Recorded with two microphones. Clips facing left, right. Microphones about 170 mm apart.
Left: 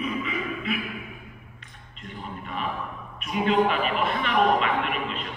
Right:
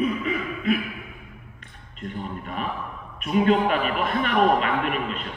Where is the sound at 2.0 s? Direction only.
45° right (ahead or behind).